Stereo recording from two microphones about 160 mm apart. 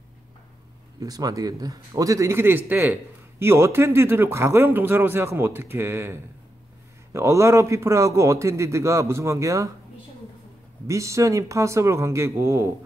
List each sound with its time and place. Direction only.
0.9 s a man's voice: 25° right (ahead or behind)
10.9 s a man's voice: 20° right (ahead or behind)